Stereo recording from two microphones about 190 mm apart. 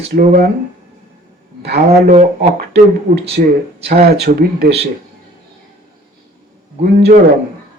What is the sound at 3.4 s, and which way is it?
Speech, 50° right (ahead or behind).